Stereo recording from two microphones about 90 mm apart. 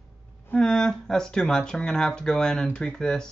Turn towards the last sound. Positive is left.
turn(degrees=10)  # may be behind; listen again after turning